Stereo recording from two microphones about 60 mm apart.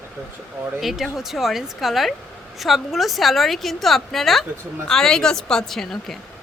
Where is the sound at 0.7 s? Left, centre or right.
Centre.